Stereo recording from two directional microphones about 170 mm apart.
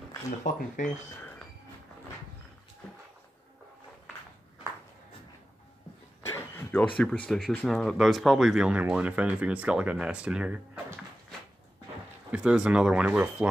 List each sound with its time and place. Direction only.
0.4 s speech: 45° left (ahead or behind)
6.3 s a sound: 10° left (ahead or behind)
7.0 s speech: 5° left (ahead or behind)
12.3 s speech: 5° right (ahead or behind)